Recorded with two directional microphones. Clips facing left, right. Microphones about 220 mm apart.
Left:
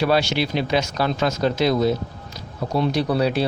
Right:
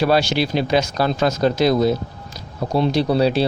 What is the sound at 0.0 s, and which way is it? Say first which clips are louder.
A man's voice: right 2 dB; 35° right (ahead or behind).